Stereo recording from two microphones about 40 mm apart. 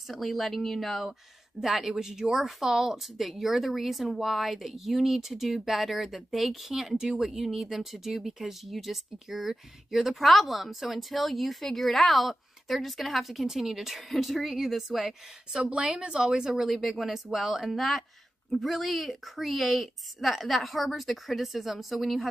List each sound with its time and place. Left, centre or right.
0.1 s speech: centre
15.5 s speech: right
16.5 s speech: centre